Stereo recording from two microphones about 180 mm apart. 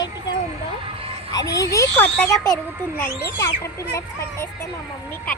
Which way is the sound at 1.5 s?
20° left (ahead or behind).